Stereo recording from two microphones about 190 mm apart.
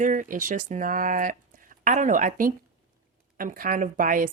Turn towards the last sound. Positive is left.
turn(degrees=-45)  # may be behind; listen again after turning